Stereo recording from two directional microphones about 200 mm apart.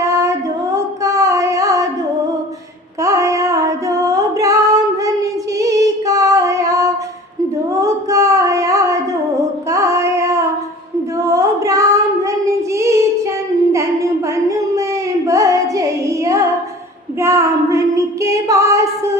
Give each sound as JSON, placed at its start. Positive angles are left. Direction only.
{"t": 0.0, "sound": "music", "side_deg": -15}
{"t": 3.0, "sound": "music", "side_deg": -15}
{"t": 7.7, "sound": "singing", "side_deg": -15}
{"t": 9.6, "sound": "female singing", "side_deg": -15}
{"t": 11.2, "sound": "child singing", "side_deg": -15}
{"t": 15.3, "sound": "carnatic music", "side_deg": -15}
{"t": 17.2, "sound": "female singing", "side_deg": -15}